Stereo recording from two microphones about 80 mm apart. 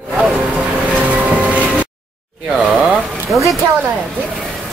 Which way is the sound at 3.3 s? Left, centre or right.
Right.